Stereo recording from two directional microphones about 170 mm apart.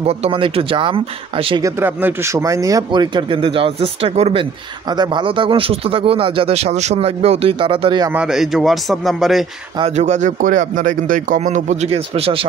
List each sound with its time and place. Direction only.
0.0 s speech: 35° right (ahead or behind)
1.6 s speech: 10° right (ahead or behind); by 4.5 s 35° right (ahead or behind)
4.9 s speech: 25° right (ahead or behind)
8.1 s a man's voice: 5° right (ahead or behind)
9.8 s a man's voice: 40° right (ahead or behind)